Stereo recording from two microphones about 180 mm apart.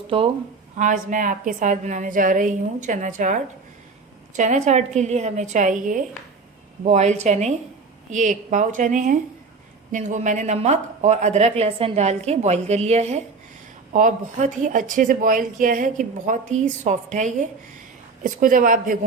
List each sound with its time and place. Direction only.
0.8 s a woman's voice: 45° right (ahead or behind)